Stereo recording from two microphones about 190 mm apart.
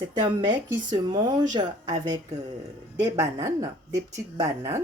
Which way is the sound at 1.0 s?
20° right (ahead or behind).